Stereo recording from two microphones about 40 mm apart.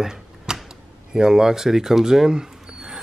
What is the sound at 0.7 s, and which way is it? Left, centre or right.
Speech, centre.